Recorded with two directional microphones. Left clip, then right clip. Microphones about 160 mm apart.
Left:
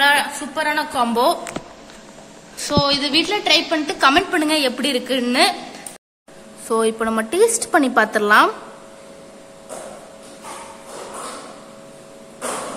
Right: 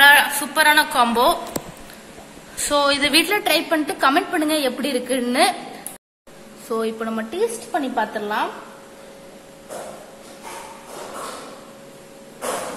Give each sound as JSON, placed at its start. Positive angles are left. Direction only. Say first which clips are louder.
{"t": 0.0, "sound": "a woman's voice", "louder": "right 4 dB", "side_deg": 15}
{"t": 2.6, "sound": "a woman's voice", "louder": "right 1 dB", "side_deg": 15}
{"t": 6.7, "sound": "a woman's voice", "louder": "left 5 dB", "side_deg": 30}